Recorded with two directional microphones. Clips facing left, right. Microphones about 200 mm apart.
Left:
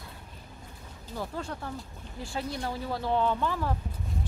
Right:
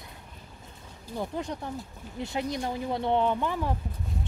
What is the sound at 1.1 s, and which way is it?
A woman's voice, 20° right (ahead or behind).